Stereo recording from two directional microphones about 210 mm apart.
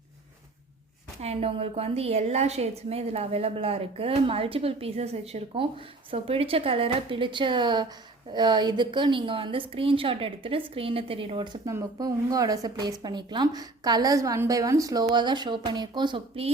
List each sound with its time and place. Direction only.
1.2 s a woman's voice: 30° right (ahead or behind)